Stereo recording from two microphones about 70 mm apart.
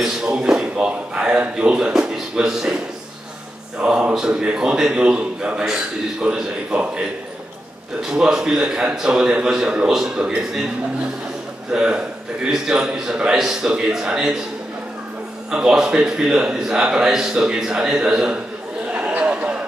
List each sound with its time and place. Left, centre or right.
0.0 s a man's voice: centre
3.8 s a man's voice: centre
8.0 s a man's voice: centre
11.7 s a man's voice: centre
15.5 s a man's voice: centre
18.9 s a sound: centre